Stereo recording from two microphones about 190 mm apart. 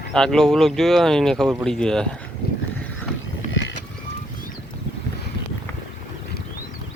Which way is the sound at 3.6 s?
85° left.